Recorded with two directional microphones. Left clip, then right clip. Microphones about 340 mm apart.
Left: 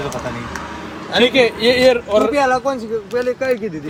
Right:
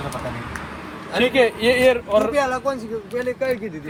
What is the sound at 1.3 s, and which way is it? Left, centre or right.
Speech, centre.